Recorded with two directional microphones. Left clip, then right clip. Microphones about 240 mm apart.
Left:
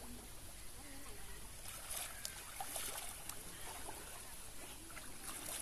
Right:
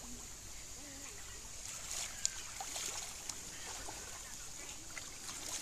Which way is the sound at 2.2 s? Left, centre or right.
Left.